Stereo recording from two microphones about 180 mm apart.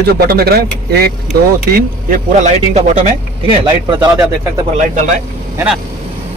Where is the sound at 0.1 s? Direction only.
55° right (ahead or behind); by 3.5 s 35° right (ahead or behind).